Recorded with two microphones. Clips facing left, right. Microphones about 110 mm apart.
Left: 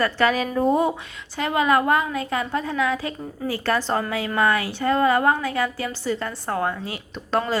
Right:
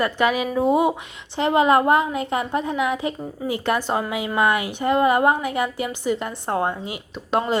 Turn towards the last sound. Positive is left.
turn(degrees=-20)  # may be behind; listen again after turning